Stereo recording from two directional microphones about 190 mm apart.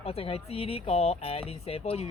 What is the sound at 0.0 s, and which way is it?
Speech, 30° left (ahead or behind).